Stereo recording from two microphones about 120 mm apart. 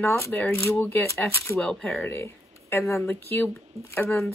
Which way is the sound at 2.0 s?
20° left (ahead or behind).